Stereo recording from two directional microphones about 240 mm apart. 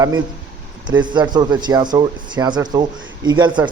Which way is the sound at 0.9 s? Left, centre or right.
Centre.